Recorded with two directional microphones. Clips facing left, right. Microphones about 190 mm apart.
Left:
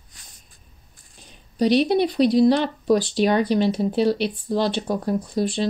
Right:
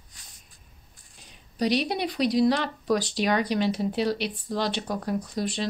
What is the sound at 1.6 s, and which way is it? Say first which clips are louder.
A woman's voice: left 7 dB; 30° left (ahead or behind).